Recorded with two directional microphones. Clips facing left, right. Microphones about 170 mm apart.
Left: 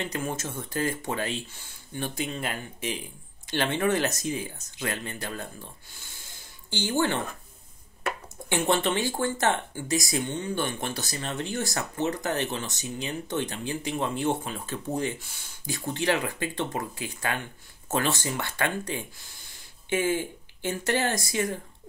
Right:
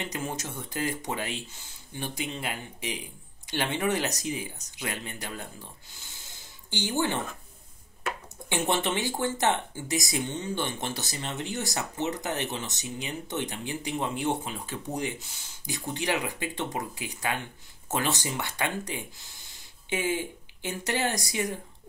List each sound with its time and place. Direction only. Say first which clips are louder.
0.0 s speech: left 3 dB; 15° right (ahead or behind)
6.7 s speech: left 2 dB; 15° right (ahead or behind)
8.5 s speech: left 3 dB; 15° right (ahead or behind)